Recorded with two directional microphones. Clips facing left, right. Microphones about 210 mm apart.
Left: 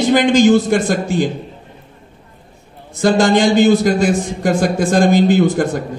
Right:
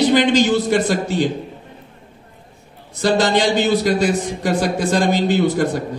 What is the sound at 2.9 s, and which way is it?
A man's voice, 50° left (ahead or behind).